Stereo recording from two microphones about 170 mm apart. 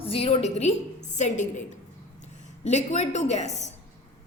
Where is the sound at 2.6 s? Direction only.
40° left (ahead or behind).